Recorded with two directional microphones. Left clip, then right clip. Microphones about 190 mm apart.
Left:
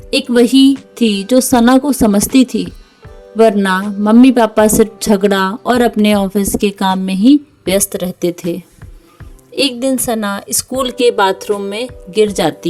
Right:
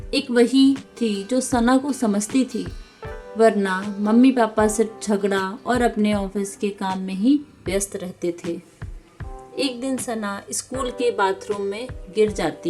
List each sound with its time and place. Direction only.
0.1 s a woman's voice: 50° left (ahead or behind)
0.9 s music: 50° left (ahead or behind)
1.3 s a woman's voice: 45° left (ahead or behind)
9.6 s a woman's voice: 50° left (ahead or behind)